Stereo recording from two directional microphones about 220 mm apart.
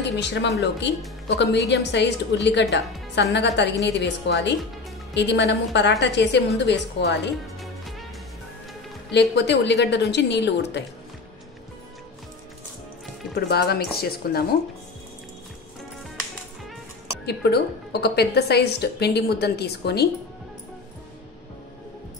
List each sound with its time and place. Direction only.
0.0 s a woman's voice: 50° left (ahead or behind)
9.1 s a woman's voice: 50° left (ahead or behind)
13.3 s a woman's voice: 45° left (ahead or behind)
17.3 s a woman's voice: 45° left (ahead or behind)